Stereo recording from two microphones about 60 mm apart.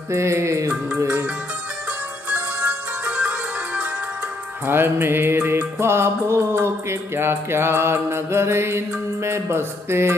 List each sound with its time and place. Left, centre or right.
0.1 s music: right
0.9 s music: right
2.2 s music: right
4.6 s music: right